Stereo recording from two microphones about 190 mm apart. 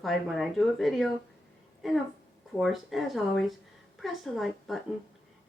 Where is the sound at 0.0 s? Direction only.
Centre (ahead or behind).